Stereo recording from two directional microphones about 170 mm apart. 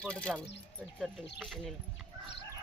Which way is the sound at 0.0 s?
5° left (ahead or behind).